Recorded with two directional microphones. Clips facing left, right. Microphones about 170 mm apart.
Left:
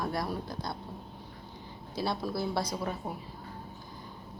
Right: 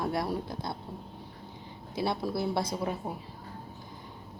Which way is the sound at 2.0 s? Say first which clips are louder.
Right 2 dB; 25° right (ahead or behind).